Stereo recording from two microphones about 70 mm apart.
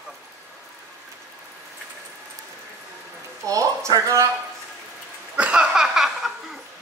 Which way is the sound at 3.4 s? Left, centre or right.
Right.